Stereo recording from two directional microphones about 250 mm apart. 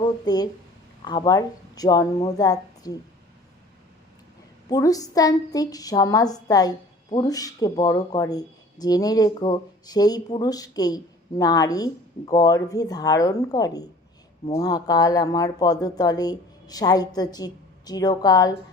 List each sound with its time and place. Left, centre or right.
0.0 s a woman's voice: centre
4.7 s a woman's voice: centre